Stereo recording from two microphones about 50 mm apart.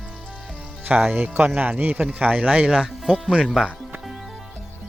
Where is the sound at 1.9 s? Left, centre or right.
Right.